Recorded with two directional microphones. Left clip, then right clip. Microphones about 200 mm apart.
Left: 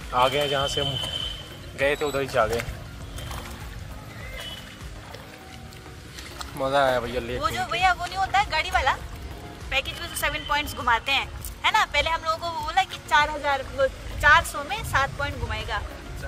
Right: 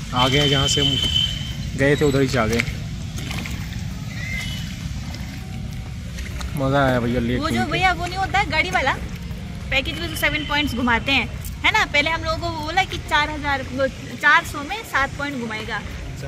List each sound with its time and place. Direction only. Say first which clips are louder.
0.3 s speech: right 6 dB; centre (ahead or behind)
1.8 s speech: right 6 dB; 10° left (ahead or behind)
6.6 s speech: right 2 dB; 10° left (ahead or behind)
7.3 s speech: even; 65° left (ahead or behind); by 15.8 s 35° left (ahead or behind)